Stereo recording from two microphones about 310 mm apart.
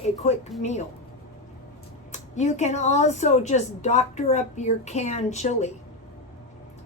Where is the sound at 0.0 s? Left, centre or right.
Left.